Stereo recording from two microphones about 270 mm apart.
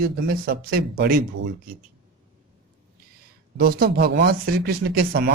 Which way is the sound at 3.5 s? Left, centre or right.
Right.